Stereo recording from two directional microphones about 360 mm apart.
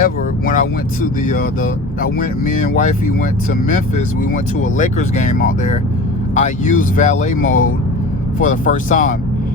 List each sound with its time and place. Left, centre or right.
0.0 s speech: left